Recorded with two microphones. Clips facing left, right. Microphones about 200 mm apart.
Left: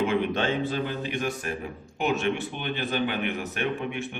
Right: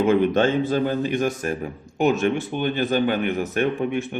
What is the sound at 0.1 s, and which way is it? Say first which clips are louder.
A man's voice: right 7 dB; 45° right (ahead or behind).